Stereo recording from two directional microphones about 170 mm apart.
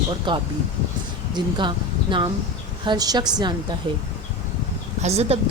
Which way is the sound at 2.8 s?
25° right (ahead or behind).